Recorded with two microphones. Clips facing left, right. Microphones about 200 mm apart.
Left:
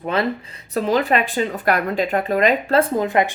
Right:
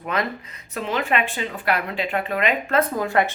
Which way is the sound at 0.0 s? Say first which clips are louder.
Left 5 dB; 30° left (ahead or behind).